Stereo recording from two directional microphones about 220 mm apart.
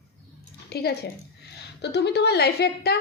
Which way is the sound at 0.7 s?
45° left (ahead or behind).